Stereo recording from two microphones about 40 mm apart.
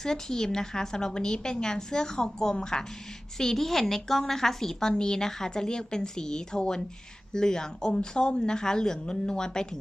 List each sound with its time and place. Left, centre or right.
0.0 s a woman's voice: centre